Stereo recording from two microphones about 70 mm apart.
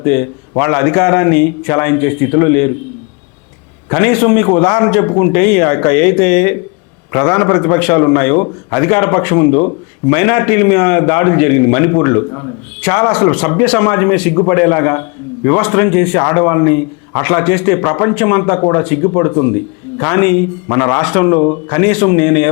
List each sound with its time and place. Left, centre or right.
0.0 s a man's voice: left
3.8 s a man's voice: left
12.8 s a man's voice: centre
21.0 s a man's voice: centre